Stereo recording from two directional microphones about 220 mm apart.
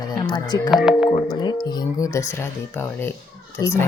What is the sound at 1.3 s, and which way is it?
Speech, 20° left (ahead or behind).